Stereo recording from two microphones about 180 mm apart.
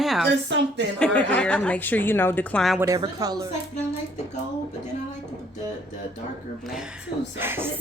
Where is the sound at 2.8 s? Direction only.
20° right (ahead or behind).